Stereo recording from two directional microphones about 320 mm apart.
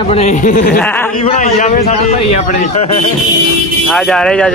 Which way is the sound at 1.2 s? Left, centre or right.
Left.